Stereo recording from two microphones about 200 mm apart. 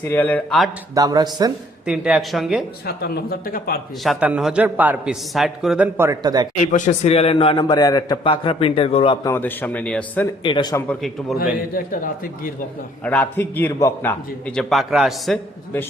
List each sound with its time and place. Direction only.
0.1 s a man's voice: 10° left (ahead or behind)
0.9 s speech: 20° right (ahead or behind)
1.9 s speech: 5° right (ahead or behind)
2.8 s speech: 50° left (ahead or behind)
4.0 s a man's voice: 5° right (ahead or behind); by 6.5 s 20° right (ahead or behind)
6.6 s a man's voice: 40° left (ahead or behind)
9.3 s a man's voice: 10° left (ahead or behind)
10.4 s a man's voice: 25° left (ahead or behind)
10.8 s speech: centre (ahead or behind)
11.7 s speech: 45° left (ahead or behind)
13.1 s a man's voice: 10° left (ahead or behind)